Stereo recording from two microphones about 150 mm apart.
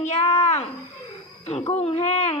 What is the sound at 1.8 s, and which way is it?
Baby cry, 45° left (ahead or behind).